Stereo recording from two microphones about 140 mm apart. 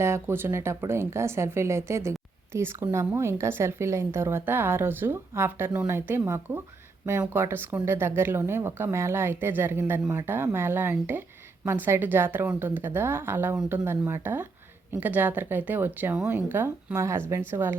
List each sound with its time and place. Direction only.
0.0 s speech: 20° right (ahead or behind)